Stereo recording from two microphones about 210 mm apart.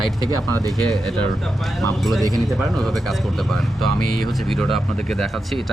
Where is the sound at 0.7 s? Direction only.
Centre (ahead or behind).